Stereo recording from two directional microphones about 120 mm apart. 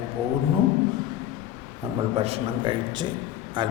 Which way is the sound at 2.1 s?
55° right (ahead or behind).